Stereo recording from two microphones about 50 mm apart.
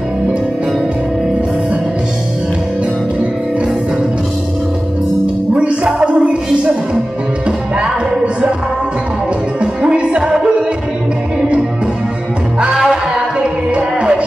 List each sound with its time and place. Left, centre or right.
5.2 s music: right
7.4 s music: centre
9.6 s music: right
12.7 s music: centre